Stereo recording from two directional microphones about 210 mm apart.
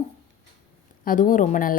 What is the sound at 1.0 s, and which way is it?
Speech, 40° left (ahead or behind).